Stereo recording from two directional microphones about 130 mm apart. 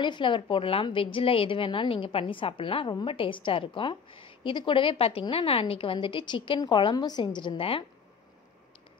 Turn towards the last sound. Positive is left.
turn(degrees=45)  # may be behind; listen again after turning